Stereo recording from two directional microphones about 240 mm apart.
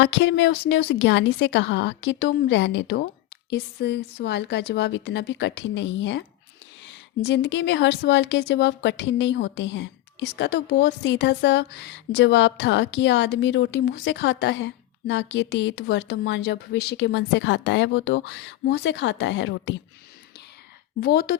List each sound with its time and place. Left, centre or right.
0.0 s a woman's voice: left
21.0 s a woman's voice: left